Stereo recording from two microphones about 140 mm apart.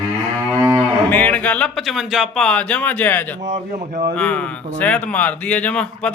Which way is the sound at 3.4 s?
60° right (ahead or behind).